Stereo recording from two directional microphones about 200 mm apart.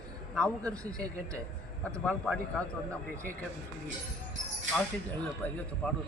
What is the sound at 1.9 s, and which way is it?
Speech, 5° left (ahead or behind).